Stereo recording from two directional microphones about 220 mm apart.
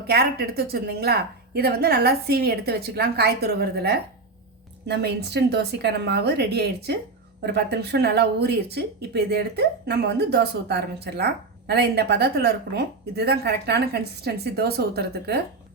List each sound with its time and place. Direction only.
0.1 s speech: 45° right (ahead or behind)